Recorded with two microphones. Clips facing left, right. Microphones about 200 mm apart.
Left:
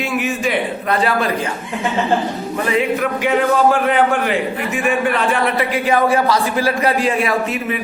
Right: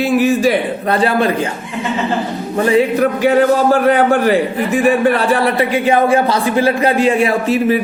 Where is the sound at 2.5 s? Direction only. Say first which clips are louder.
Right 6 dB; 30° right (ahead or behind).